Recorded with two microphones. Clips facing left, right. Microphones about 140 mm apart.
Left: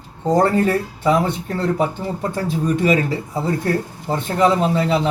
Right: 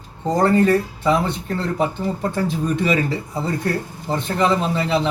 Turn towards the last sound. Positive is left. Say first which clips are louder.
# left 2 dB
turn(degrees=5)  # may be behind; listen again after turning